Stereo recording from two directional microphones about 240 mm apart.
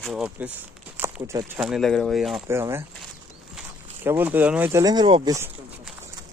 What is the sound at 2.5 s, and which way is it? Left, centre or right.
Speech, centre.